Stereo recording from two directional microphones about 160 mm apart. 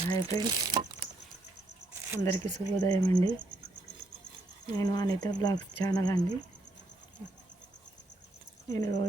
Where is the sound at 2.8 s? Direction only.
25° left (ahead or behind).